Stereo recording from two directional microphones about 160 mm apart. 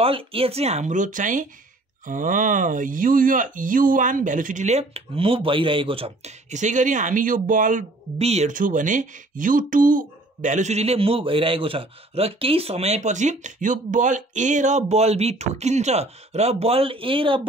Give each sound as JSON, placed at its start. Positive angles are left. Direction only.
{"t": 0.0, "sound": "speech", "side_deg": -35}
{"t": 8.2, "sound": "speech", "side_deg": -40}